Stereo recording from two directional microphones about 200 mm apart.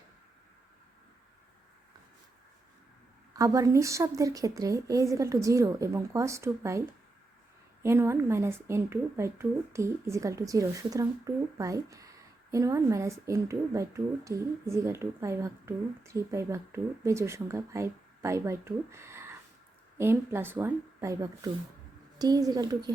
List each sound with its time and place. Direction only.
3.3 s a woman's voice: 15° right (ahead or behind)